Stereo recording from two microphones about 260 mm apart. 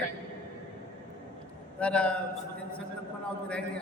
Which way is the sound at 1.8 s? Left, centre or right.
Centre.